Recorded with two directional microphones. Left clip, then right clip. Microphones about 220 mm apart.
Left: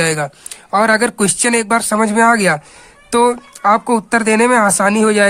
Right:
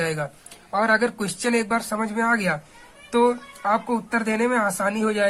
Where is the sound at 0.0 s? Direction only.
45° left (ahead or behind).